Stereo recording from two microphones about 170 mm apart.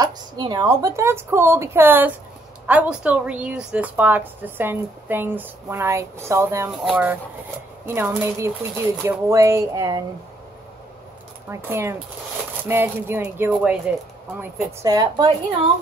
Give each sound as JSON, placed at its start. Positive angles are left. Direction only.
{"t": 0.0, "sound": "a woman's voice", "side_deg": -25}
{"t": 11.4, "sound": "a woman's voice", "side_deg": -15}